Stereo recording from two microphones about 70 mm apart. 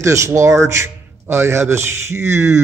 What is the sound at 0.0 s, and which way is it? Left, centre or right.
A man's voice, right.